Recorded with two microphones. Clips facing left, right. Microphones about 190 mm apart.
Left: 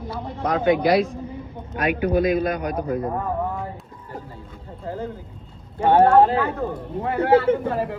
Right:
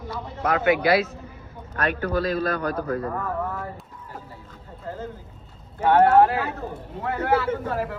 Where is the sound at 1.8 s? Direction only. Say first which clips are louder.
Left 5 dB; 15° left (ahead or behind).